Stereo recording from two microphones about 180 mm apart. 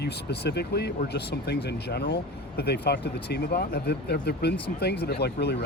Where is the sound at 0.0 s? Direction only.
65° left (ahead or behind).